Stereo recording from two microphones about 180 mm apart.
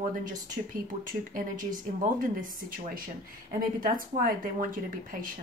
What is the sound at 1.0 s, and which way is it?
Speech, 50° right (ahead or behind).